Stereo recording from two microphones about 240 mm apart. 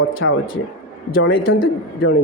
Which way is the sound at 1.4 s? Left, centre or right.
Left.